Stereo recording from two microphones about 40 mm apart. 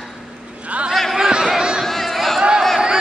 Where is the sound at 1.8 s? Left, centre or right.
Centre.